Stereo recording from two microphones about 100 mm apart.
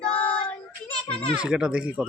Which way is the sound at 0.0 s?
75° left (ahead or behind).